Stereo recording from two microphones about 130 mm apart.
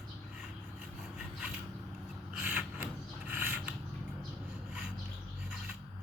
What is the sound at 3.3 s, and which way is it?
Mechanisms, 15° right (ahead or behind).